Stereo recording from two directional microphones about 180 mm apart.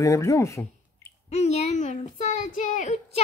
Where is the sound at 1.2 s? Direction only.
35° left (ahead or behind).